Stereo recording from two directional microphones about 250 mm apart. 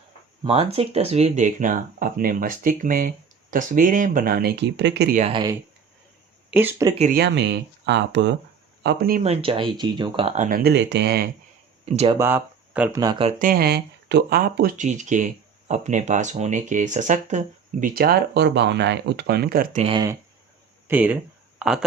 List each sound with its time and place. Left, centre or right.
0.4 s speech: right
5.3 s speech: centre
6.9 s speech: right
7.2 s speech: right
9.2 s speech: right
11.9 s speech: right
12.2 s speech: centre
13.4 s speech: right; by 20.1 s centre
20.8 s speech: centre